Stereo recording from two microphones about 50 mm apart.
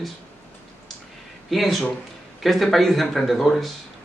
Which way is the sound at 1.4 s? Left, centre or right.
Centre.